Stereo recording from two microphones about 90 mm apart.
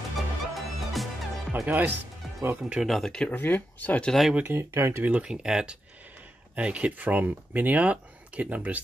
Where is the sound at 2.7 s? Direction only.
Centre (ahead or behind).